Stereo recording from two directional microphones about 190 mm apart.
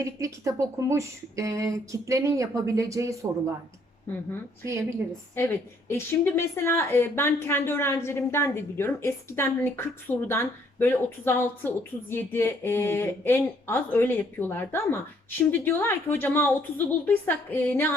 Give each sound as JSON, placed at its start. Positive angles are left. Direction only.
{"t": 0.0, "sound": "speech", "side_deg": -15}
{"t": 4.6, "sound": "speech", "side_deg": -15}
{"t": 5.4, "sound": "a woman's voice", "side_deg": 15}